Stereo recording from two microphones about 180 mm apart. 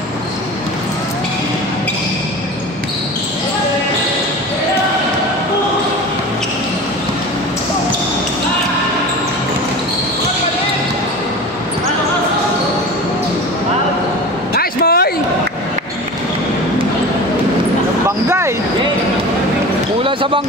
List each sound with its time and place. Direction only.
14.5 s vehicle: 55° left (ahead or behind)
20.0 s basketball bounce: 30° right (ahead or behind)